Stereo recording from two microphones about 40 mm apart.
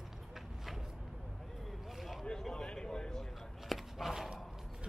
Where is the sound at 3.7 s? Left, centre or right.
Centre.